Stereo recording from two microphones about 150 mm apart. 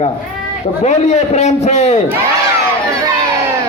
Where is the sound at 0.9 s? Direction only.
50° left (ahead or behind).